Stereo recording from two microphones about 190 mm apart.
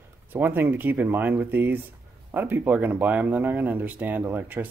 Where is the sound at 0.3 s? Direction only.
10° right (ahead or behind).